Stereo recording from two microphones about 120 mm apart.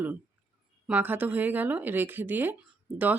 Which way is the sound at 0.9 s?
15° right (ahead or behind).